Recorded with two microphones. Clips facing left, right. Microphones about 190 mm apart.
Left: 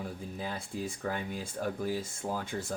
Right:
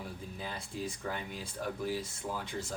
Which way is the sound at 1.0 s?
45° left (ahead or behind).